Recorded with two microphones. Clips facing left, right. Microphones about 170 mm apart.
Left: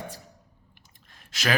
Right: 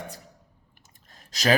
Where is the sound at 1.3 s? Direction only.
40° right (ahead or behind).